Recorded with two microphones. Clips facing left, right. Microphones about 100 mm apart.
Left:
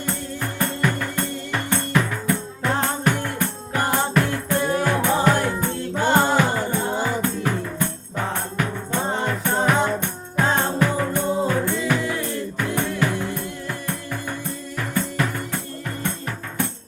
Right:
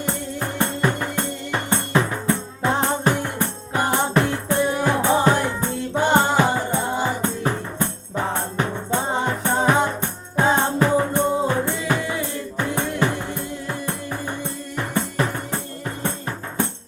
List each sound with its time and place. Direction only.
0.6 s music: 25° right (ahead or behind)